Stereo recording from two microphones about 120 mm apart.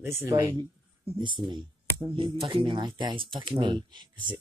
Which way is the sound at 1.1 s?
40° right (ahead or behind).